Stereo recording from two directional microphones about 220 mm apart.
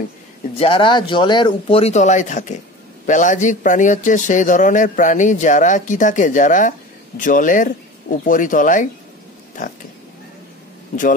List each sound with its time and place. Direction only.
0.6 s speech: 25° left (ahead or behind)